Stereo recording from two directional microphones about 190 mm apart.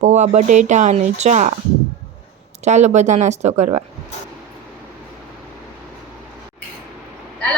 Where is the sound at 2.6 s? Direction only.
35° right (ahead or behind).